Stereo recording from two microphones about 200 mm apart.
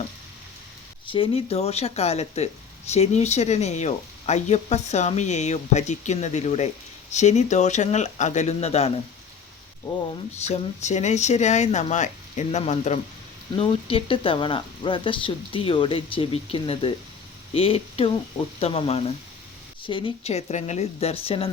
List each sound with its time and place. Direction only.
1.0 s speech: 25° left (ahead or behind)
10.4 s speech: 30° left (ahead or behind)